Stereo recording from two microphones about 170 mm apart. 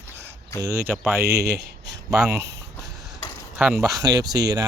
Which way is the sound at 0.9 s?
10° right (ahead or behind).